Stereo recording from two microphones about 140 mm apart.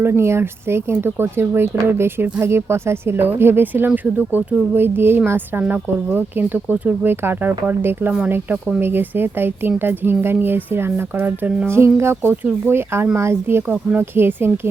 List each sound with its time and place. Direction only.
0.0 s speech: 15° right (ahead or behind)